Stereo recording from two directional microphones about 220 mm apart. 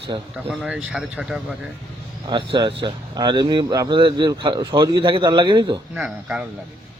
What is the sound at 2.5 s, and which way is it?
Speech, 20° right (ahead or behind).